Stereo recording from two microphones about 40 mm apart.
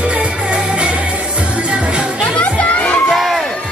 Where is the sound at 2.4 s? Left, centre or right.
Left.